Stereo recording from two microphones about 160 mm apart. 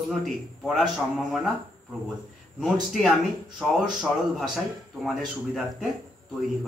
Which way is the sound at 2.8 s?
Centre (ahead or behind).